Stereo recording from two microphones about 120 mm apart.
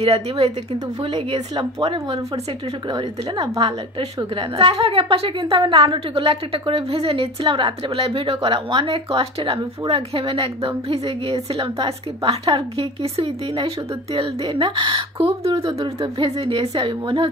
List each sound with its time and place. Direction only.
0.0 s a woman's voice: 60° right (ahead or behind)
1.5 s speech: 40° right (ahead or behind)
4.4 s a woman's voice: 55° right (ahead or behind)